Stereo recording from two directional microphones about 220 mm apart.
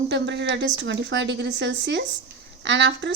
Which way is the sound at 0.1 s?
55° right (ahead or behind).